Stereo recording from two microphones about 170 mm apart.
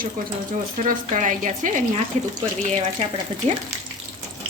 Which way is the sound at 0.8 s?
50° right (ahead or behind).